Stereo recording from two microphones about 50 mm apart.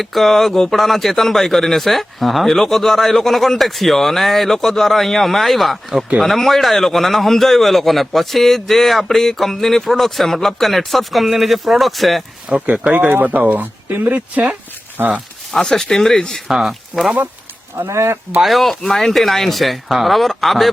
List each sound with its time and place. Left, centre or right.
0.0 s a man's voice: centre
12.6 s speech: right
13.1 s speech: right
15.5 s speech: centre
16.5 s a man's voice: centre
17.8 s speech: right
18.4 s a man's voice: centre